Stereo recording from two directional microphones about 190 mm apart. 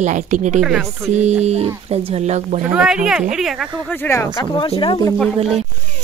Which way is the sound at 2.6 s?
5° right (ahead or behind).